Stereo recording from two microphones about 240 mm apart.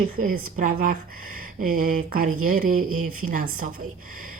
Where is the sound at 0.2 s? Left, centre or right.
Right.